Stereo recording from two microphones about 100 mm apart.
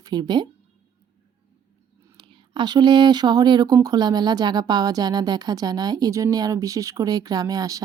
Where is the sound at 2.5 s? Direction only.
45° right (ahead or behind).